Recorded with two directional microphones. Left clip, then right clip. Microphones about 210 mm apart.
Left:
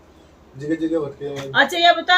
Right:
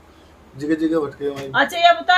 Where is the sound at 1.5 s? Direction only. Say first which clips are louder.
Even; centre (ahead or behind).